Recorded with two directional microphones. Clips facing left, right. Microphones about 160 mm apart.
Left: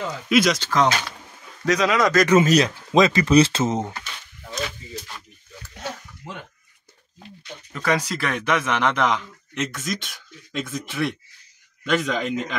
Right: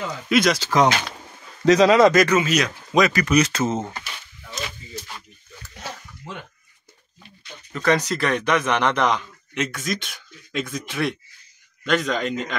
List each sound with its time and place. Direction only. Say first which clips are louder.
0.3 s speech: even; centre (ahead or behind)
0.7 s speech: right 2 dB; 15° right (ahead or behind)
1.7 s speech: right 6 dB; 30° right (ahead or behind)
2.3 s speech: left 4 dB; 35° left (ahead or behind); by 3.9 s 20° left (ahead or behind)
7.7 s speech: right 3 dB; 10° left (ahead or behind)